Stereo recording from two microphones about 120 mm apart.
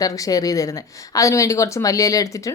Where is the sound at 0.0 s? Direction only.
30° left (ahead or behind).